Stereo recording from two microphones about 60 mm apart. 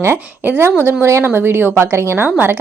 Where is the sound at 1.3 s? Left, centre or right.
Right.